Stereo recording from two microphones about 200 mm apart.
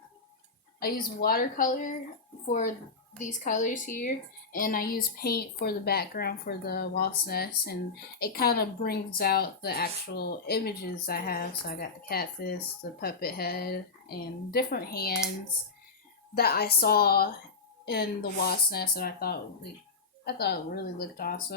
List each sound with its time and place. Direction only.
0.8 s speech: 50° left (ahead or behind)
3.2 s speech: 40° left (ahead or behind)
16.3 s speech: 50° left (ahead or behind)